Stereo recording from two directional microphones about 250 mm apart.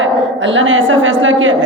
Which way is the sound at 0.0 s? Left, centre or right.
Right.